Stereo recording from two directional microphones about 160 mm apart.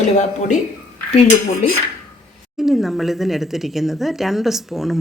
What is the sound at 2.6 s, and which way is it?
Speech, centre (ahead or behind).